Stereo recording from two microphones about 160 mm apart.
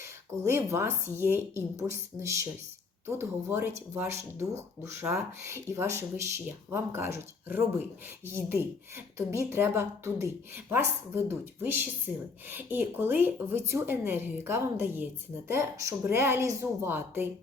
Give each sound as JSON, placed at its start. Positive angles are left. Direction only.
{"t": 0.0, "sound": "speech", "side_deg": -15}